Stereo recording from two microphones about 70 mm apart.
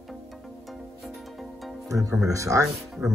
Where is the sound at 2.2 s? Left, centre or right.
Right.